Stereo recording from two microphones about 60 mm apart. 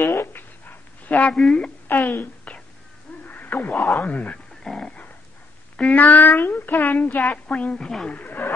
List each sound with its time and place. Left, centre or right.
0.0 s dog: left
1.3 s speech: centre
1.9 s speech: left
2.5 s whispering: centre
3.3 s a sound: left
3.9 s a woman's voice: left
4.6 s dog: centre
5.8 s a woman's voice: left
8.2 s a sound: left